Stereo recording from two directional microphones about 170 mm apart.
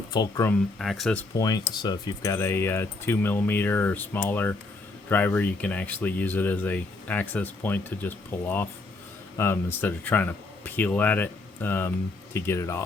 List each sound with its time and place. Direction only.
0.1 s speech: 20° left (ahead or behind)
0.8 s speech: centre (ahead or behind)
1.4 s speech: 20° left (ahead or behind)